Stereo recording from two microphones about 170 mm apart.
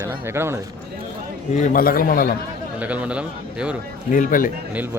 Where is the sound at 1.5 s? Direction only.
50° left (ahead or behind).